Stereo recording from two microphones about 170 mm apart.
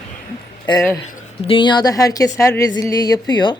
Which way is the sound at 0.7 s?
20° left (ahead or behind).